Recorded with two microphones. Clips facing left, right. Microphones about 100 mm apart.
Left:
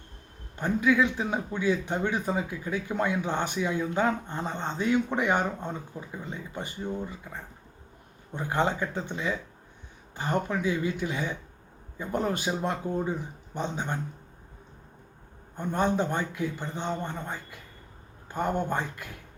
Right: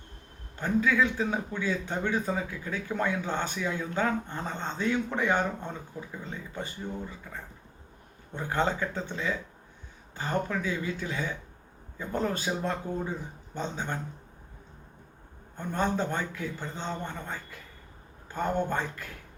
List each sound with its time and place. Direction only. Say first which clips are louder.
0.6 s speech: left 2 dB; 15° left (ahead or behind)
15.5 s speech: left 3 dB; 15° left (ahead or behind)